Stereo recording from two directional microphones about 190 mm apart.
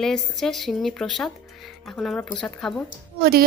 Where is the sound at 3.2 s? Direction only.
55° right (ahead or behind).